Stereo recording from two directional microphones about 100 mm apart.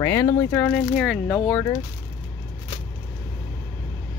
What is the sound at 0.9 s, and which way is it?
Speech, 5° left (ahead or behind).